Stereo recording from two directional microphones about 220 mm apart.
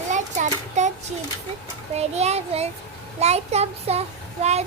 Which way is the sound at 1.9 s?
30° right (ahead or behind).